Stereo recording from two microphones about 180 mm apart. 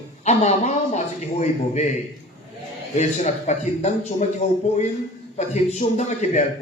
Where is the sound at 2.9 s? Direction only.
40° left (ahead or behind).